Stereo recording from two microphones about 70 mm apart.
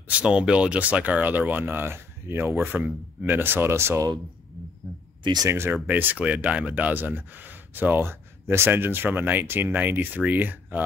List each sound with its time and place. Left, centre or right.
0.1 s speech: centre; by 4.0 s right
5.5 s speech: right
5.9 s speech: right